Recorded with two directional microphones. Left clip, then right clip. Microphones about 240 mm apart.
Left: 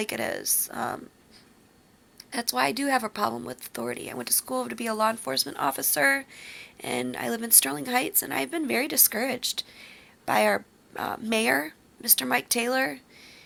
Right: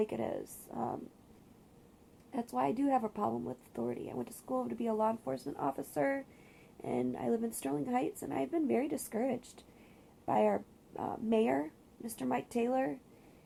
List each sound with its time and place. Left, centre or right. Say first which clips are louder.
0.0 s a woman's voice: left 6 dB; centre
2.6 s a woman's voice: left 7 dB; centre
3.8 s a woman's voice: left 7 dB; centre